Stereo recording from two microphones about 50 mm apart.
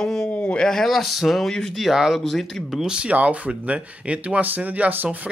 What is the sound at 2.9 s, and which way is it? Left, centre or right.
Speech, right.